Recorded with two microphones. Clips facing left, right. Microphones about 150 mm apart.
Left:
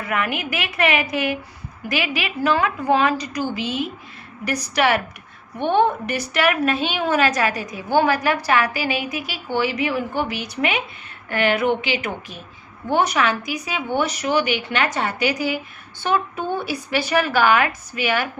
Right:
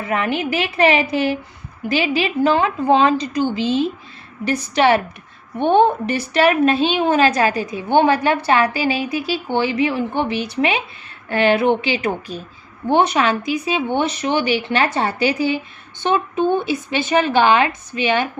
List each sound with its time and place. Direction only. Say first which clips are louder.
0.0 s a woman's voice: right 4 dB; 30° right (ahead or behind)